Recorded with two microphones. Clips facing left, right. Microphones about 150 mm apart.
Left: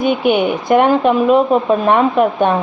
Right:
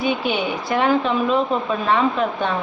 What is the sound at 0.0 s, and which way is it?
Speech, 55° left (ahead or behind).